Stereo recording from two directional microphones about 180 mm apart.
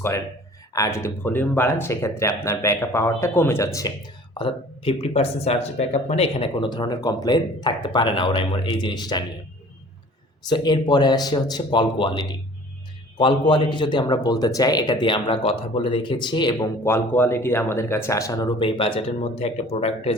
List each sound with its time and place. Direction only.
0.7 s speech: 15° left (ahead or behind)
10.5 s speech: 25° left (ahead or behind)
13.5 s speech: 25° left (ahead or behind)